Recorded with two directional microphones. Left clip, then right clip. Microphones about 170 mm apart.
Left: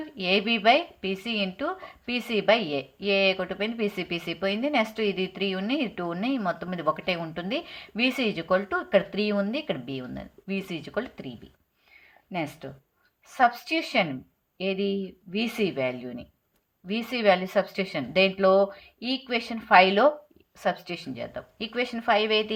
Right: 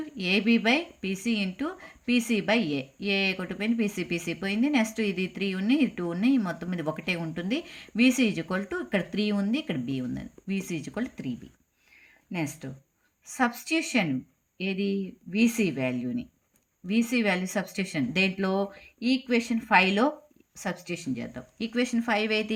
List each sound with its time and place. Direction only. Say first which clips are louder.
0.2 s speech: left 1 dB; 35° right (ahead or behind)
12.3 s speech: left 2 dB; 35° right (ahead or behind)